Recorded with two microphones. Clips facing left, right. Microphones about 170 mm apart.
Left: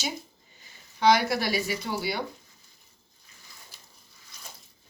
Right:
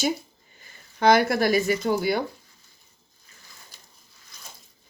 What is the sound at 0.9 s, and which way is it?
Speech, 50° right (ahead or behind).